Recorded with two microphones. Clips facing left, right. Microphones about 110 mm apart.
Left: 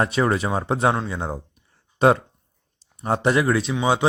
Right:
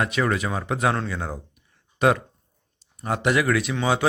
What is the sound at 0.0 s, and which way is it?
A man's voice, 30° left (ahead or behind).